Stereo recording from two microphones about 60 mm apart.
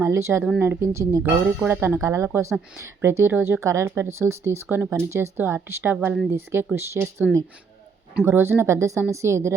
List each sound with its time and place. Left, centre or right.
0.0 s speech: right
1.2 s speech: right
2.0 s speech: right
3.6 s speech: right